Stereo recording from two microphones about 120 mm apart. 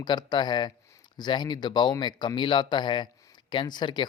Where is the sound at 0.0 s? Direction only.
35° left (ahead or behind).